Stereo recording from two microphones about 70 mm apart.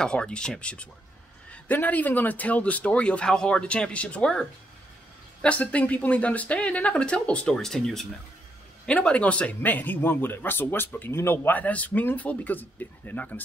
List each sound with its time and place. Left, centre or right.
0.0 s speech: centre
8.8 s speech: centre